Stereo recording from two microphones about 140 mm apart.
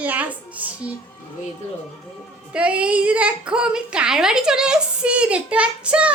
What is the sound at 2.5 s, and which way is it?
A child's voice, 10° right (ahead or behind).